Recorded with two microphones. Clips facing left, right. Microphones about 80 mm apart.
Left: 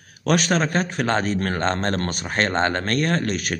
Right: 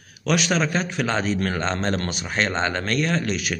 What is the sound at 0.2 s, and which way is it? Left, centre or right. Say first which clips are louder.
A man's voice: left 2 dB; left.